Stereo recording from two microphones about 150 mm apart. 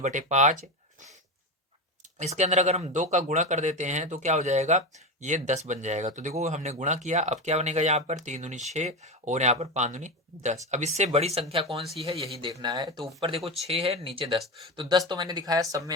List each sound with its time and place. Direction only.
0.0 s speech: 55° right (ahead or behind)
2.1 s speech: 50° right (ahead or behind)
12.4 s speech: 30° right (ahead or behind)
13.2 s speech: 40° right (ahead or behind)